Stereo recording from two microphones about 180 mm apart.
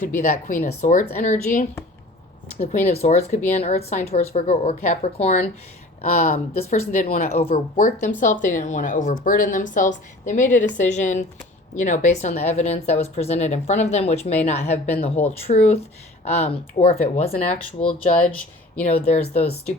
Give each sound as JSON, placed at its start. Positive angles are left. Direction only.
{"t": 0.2, "sound": "speech", "side_deg": 45}
{"t": 7.3, "sound": "speech", "side_deg": 35}
{"t": 7.8, "sound": "speech", "side_deg": 45}